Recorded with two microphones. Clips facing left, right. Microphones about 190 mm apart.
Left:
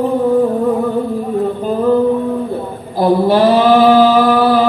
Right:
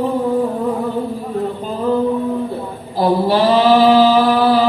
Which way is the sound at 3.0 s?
50° left (ahead or behind).